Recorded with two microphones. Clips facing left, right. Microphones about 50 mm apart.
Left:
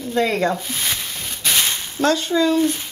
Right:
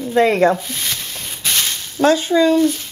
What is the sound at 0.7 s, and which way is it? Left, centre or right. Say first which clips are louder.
Speech: even; centre.